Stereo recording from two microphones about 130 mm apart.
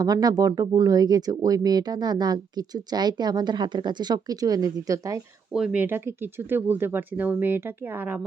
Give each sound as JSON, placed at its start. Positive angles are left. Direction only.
{"t": 0.0, "sound": "speech", "side_deg": -30}
{"t": 5.5, "sound": "speech", "side_deg": -10}